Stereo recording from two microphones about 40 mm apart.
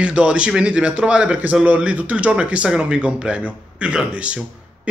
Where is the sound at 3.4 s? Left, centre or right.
Right.